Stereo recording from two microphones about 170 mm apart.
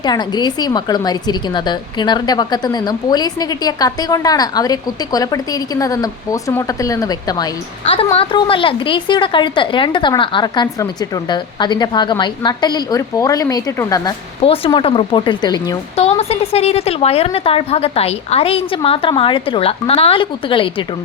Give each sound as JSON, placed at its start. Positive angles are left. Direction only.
{"t": 0.0, "sound": "a woman's voice", "side_deg": 25}
{"t": 14.4, "sound": "a woman's voice", "side_deg": 35}
{"t": 16.0, "sound": "a woman's voice", "side_deg": 35}